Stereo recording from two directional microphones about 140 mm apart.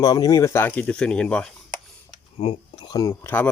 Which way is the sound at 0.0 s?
30° left (ahead or behind).